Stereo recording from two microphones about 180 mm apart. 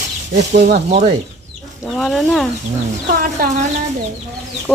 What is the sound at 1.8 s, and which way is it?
Speech, centre (ahead or behind).